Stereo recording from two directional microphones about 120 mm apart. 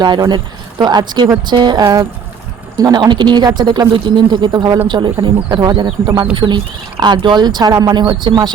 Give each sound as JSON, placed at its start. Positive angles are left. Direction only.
{"t": 0.0, "sound": "speech", "side_deg": -40}